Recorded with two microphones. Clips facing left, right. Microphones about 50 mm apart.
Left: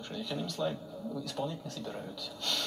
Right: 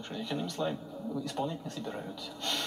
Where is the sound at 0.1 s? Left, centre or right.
Centre.